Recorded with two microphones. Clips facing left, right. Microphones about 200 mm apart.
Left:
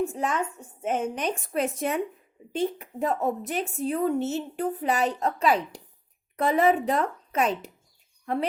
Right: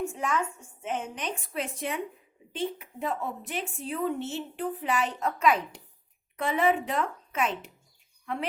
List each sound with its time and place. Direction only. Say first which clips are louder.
0.0 s speech: left 3 dB; 35° left (ahead or behind)